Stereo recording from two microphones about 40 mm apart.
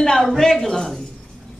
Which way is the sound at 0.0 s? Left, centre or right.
Centre.